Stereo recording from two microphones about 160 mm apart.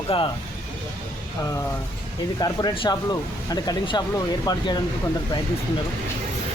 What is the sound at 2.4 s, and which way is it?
Speech, 25° left (ahead or behind).